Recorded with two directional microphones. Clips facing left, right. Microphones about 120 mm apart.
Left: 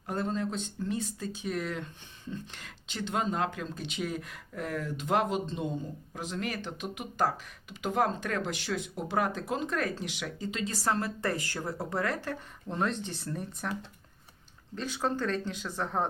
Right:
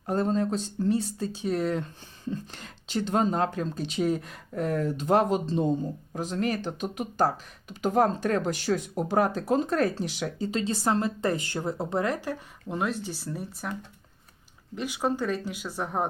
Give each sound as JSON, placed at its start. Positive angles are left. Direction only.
{"t": 0.0, "sound": "speech", "side_deg": -35}
{"t": 14.8, "sound": "speech", "side_deg": -10}